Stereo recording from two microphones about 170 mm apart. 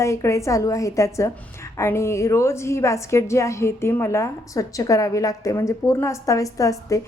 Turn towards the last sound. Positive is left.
turn(degrees=20)  # may be behind; listen again after turning